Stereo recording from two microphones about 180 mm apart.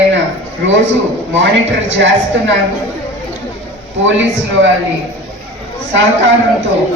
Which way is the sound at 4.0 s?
90° right.